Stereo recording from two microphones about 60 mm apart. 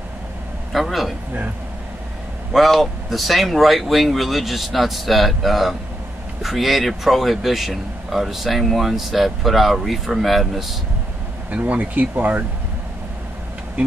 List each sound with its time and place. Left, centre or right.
0.7 s speech: centre
2.5 s speech: centre
11.5 s speech: right